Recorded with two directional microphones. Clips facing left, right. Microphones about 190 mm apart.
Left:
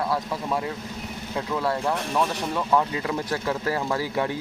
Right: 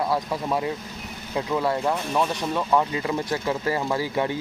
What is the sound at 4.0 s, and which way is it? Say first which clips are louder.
Speech: right 1 dB; centre (ahead or behind).